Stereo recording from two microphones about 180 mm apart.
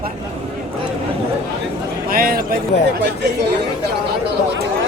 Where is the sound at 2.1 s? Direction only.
55° right (ahead or behind).